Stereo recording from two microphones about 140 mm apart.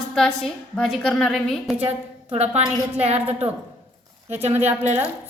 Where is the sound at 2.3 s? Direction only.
50° right (ahead or behind).